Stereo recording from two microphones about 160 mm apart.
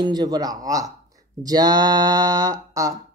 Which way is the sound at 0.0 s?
25° right (ahead or behind).